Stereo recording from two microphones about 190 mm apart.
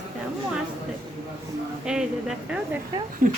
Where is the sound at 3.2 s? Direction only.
45° right (ahead or behind).